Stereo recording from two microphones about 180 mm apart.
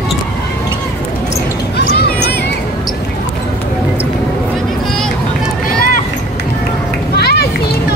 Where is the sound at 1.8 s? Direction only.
65° left (ahead or behind).